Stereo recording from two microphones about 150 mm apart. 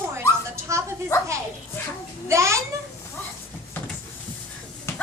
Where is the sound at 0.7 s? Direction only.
20° right (ahead or behind).